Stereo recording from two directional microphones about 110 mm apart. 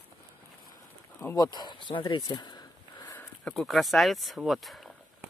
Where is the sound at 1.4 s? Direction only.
40° left (ahead or behind).